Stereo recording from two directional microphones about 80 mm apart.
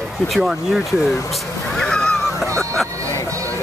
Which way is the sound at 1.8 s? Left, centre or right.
Centre.